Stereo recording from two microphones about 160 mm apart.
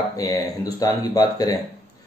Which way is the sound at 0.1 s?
20° left (ahead or behind).